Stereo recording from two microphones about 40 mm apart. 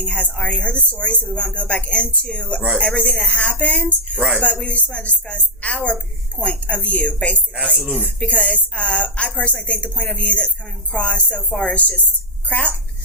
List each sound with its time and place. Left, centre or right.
0.0 s a woman's voice: left
3.2 s a woman's voice: left